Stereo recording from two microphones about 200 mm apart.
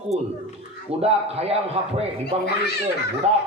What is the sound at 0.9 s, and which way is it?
Speech, 30° right (ahead or behind).